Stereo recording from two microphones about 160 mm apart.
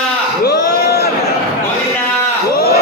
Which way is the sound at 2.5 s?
80° left.